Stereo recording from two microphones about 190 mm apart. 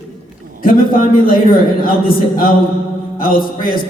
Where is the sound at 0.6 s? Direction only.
50° left (ahead or behind).